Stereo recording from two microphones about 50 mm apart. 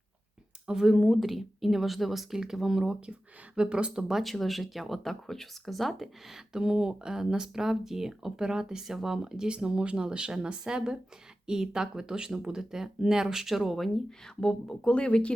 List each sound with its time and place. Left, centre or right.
0.7 s speech: centre
4.2 s speech: centre
14.8 s speech: left